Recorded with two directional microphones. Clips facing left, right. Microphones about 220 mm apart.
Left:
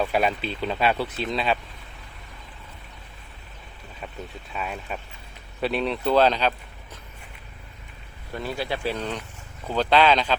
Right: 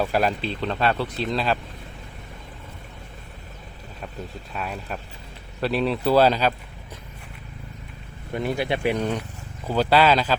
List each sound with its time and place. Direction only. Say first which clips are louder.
0.0 s speech: right 1 dB; centre (ahead or behind)
4.5 s speech: even; centre (ahead or behind)
8.3 s speech: right 4 dB; 20° right (ahead or behind)